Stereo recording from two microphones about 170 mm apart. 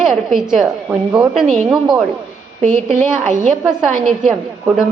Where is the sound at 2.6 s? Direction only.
45° right (ahead or behind).